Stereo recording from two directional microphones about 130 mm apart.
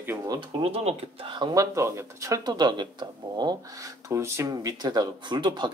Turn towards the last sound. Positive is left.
turn(degrees=-35)  # may be behind; listen again after turning